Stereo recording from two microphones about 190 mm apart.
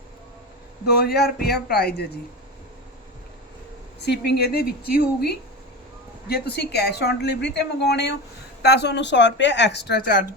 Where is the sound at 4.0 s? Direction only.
60° left (ahead or behind).